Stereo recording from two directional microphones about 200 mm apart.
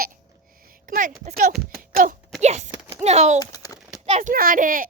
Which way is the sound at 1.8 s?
45° right (ahead or behind).